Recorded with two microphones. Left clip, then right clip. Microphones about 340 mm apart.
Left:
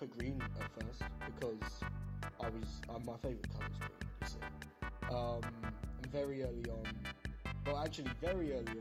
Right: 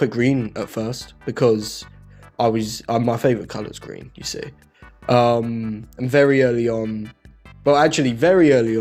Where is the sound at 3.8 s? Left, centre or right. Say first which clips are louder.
Right 15 dB; centre.